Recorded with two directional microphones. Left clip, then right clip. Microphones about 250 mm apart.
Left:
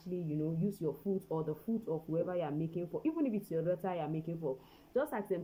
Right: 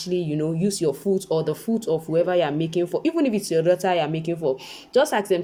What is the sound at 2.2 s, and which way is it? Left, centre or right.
Speech, right.